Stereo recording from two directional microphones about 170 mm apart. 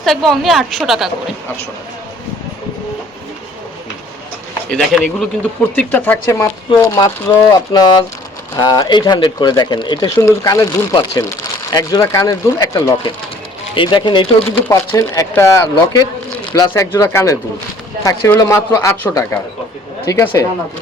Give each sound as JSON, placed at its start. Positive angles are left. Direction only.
{"t": 0.0, "sound": "a woman's voice", "side_deg": 0}
{"t": 4.7, "sound": "a woman's voice", "side_deg": 0}
{"t": 5.7, "sound": "a man's voice", "side_deg": 10}